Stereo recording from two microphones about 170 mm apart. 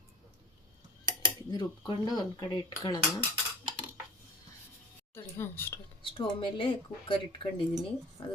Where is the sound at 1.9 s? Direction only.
25° left (ahead or behind).